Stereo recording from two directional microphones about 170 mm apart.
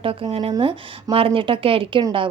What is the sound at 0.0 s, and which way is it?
A woman's voice, 30° right (ahead or behind).